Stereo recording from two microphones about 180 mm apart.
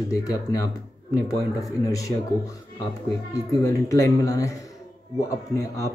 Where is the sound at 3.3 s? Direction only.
15° left (ahead or behind).